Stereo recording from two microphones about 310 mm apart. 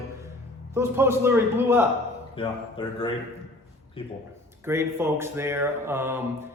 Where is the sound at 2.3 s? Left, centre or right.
Centre.